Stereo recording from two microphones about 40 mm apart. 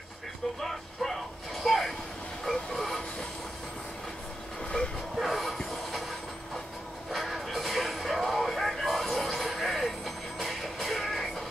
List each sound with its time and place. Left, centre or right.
0.6 s speech: centre
2.4 s train: centre
4.6 s speech: left
5.2 s train: centre
7.1 s music: centre